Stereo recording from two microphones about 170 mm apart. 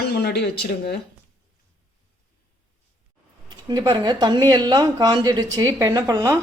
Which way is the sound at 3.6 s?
25° right (ahead or behind).